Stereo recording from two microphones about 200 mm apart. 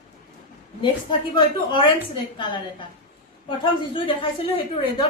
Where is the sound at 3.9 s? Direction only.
25° left (ahead or behind).